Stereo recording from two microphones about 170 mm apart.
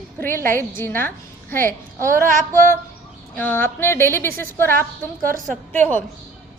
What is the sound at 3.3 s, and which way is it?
Speech, 10° left (ahead or behind).